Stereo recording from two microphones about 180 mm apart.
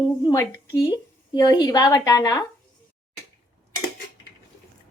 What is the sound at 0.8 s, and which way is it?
Speech, 25° left (ahead or behind).